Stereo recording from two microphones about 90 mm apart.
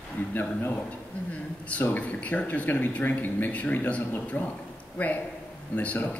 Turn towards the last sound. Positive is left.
turn(degrees=20)  # may be behind; listen again after turning